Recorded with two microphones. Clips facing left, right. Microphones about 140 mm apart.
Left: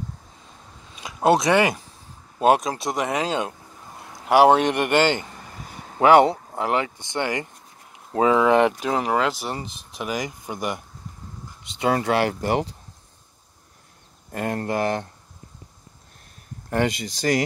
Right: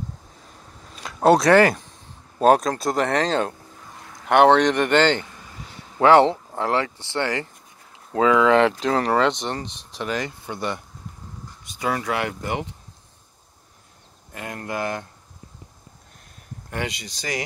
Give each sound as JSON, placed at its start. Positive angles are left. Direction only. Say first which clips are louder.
{"t": 0.9, "sound": "speech", "louder": "right 2 dB", "side_deg": 0}
{"t": 11.8, "sound": "speech", "louder": "left 4 dB", "side_deg": 30}
{"t": 14.3, "sound": "speech", "louder": "left 5 dB", "side_deg": 40}
{"t": 16.7, "sound": "speech", "louder": "left 7 dB", "side_deg": 50}